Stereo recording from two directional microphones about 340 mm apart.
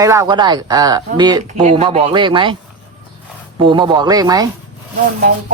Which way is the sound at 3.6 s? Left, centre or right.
Centre.